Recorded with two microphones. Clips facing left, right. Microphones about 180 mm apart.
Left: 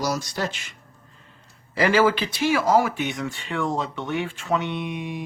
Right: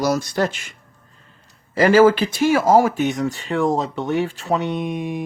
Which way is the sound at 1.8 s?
45° right (ahead or behind).